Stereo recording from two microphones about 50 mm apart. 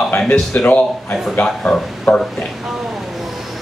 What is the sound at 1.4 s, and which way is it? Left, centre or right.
Speech, left.